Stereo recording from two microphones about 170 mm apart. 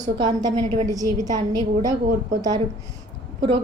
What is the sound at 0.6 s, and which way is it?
Speech, 40° right (ahead or behind).